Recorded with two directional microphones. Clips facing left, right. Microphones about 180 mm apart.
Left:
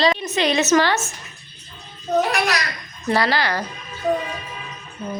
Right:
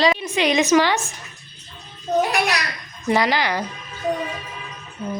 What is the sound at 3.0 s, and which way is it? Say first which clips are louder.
Speech: right 1 dB; 15° right (ahead or behind).